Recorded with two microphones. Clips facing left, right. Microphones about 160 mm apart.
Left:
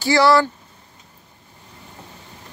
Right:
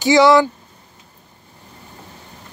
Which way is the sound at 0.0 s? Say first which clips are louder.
Right 4 dB; 20° right (ahead or behind).